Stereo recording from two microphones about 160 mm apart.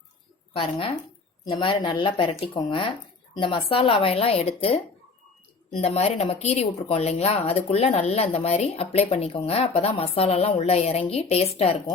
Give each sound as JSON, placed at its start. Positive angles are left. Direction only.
{"t": 0.5, "sound": "speech", "side_deg": 35}
{"t": 5.8, "sound": "speech", "side_deg": 40}